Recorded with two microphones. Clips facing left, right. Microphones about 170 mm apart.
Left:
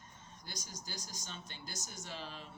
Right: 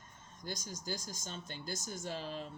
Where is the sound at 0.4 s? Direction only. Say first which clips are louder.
Right 8 dB; 50° right (ahead or behind).